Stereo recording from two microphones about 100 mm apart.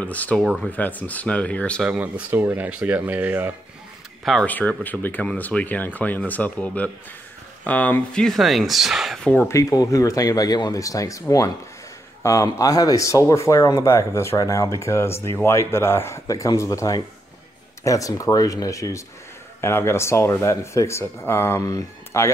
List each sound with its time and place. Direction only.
0.0 s speech: 15° left (ahead or behind)
1.8 s speech: 10° right (ahead or behind)
4.2 s speech: centre (ahead or behind)
4.5 s speech: 15° left (ahead or behind); by 9.3 s centre (ahead or behind)
9.5 s speech: 35° left (ahead or behind)